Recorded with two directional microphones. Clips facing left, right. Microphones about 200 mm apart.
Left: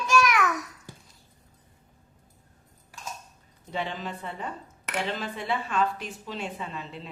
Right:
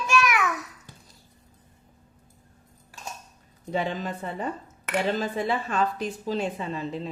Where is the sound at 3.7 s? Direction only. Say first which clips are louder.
Right 4 dB; 45° right (ahead or behind).